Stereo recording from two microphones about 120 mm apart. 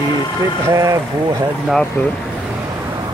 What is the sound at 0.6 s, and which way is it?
Speech, 25° right (ahead or behind).